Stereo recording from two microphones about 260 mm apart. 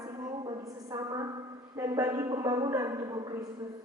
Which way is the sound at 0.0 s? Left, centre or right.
Centre.